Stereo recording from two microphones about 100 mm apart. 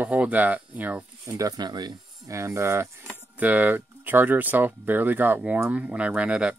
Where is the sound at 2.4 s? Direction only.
30° right (ahead or behind).